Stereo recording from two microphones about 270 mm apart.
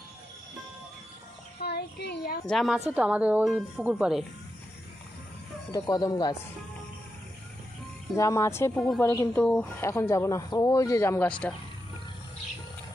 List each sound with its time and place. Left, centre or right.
1.6 s a child's voice: left
2.4 s a woman's voice: centre
5.7 s a woman's voice: centre
8.2 s a woman's voice: centre